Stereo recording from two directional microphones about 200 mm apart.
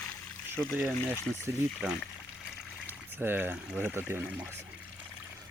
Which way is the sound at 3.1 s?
10° right (ahead or behind).